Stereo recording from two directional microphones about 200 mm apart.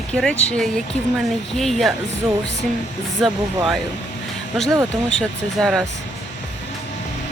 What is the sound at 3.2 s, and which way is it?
Speech, centre (ahead or behind).